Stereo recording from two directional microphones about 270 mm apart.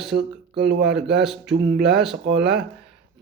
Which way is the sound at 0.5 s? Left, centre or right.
Right.